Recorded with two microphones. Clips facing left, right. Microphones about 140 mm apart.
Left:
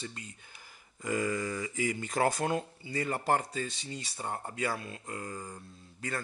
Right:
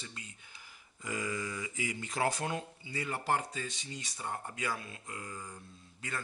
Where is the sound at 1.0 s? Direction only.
50° left (ahead or behind).